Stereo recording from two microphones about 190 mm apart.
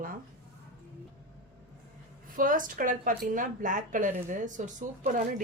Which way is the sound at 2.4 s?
45° right (ahead or behind).